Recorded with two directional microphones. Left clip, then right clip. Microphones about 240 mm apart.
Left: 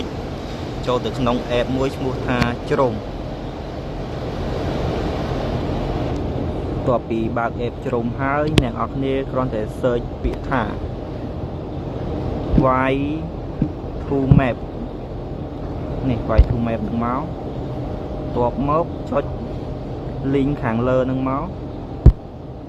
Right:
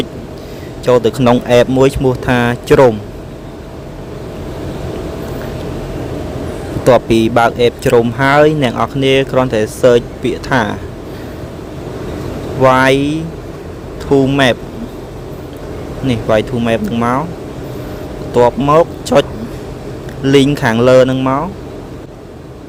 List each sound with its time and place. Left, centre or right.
0.9 s speech: right
6.8 s speech: right
12.6 s speech: right
16.0 s speech: right
18.4 s speech: right
20.2 s speech: right